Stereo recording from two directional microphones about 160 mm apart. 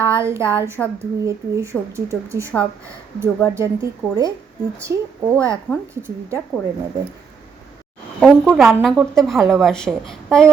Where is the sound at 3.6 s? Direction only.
20° right (ahead or behind).